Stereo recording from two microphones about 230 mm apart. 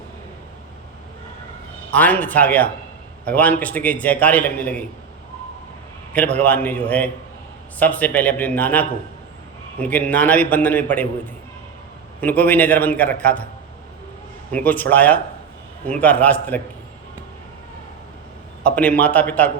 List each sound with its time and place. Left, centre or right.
1.9 s a man's voice: centre
6.1 s a man's voice: centre
12.2 s a man's voice: centre
14.5 s a man's voice: centre
18.6 s a man's voice: centre